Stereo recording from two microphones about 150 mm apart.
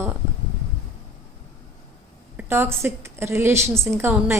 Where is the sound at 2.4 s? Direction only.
15° right (ahead or behind).